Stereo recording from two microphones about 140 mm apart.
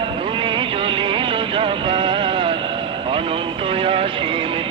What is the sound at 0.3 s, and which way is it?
Music, 40° right (ahead or behind).